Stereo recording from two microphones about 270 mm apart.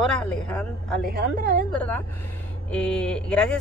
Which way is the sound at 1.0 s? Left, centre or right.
Right.